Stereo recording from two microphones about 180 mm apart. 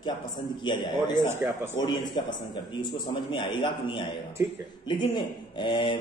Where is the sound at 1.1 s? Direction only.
40° left (ahead or behind).